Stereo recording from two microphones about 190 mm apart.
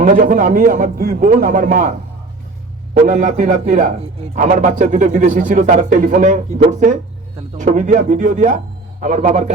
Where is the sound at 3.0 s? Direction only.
40° right (ahead or behind).